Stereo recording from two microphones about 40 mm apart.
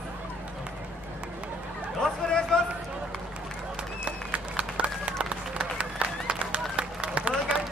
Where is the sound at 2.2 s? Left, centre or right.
Left.